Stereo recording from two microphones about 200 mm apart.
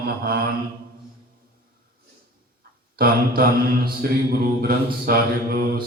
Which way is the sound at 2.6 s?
50° right (ahead or behind).